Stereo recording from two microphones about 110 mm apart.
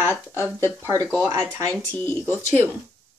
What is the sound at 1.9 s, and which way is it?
Speech, 15° left (ahead or behind).